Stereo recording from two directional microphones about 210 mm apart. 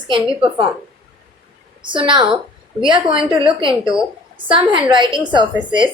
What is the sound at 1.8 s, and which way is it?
A woman's voice, 25° right (ahead or behind).